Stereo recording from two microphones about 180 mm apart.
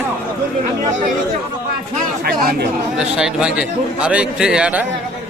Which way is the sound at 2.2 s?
55° right (ahead or behind).